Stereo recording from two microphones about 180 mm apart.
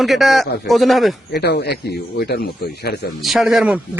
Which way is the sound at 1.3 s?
65° left (ahead or behind).